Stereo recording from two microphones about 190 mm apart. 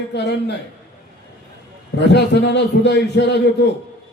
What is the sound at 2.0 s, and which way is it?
A man's voice, 65° left (ahead or behind).